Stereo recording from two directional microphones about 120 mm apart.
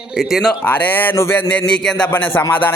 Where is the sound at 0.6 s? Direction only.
15° left (ahead or behind).